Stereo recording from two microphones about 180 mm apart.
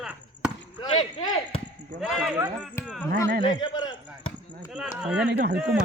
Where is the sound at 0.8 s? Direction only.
25° left (ahead or behind).